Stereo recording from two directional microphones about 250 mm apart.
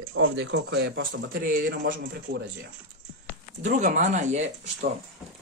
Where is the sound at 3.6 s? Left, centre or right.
Right.